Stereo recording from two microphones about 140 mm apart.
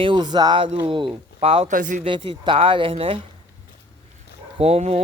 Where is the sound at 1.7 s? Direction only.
65° right (ahead or behind).